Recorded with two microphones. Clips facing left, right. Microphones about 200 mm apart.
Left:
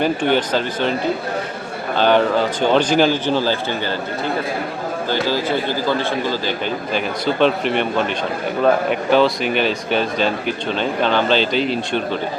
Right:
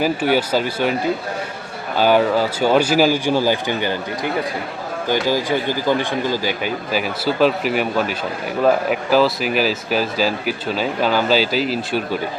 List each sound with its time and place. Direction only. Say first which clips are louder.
0.0 s speech: even; 5° right (ahead or behind)
2.0 s speech: even; 10° right (ahead or behind)